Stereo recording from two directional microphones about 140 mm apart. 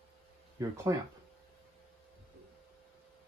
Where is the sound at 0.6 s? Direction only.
25° right (ahead or behind).